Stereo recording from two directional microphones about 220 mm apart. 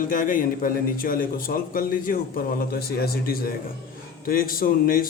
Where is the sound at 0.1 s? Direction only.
40° left (ahead or behind).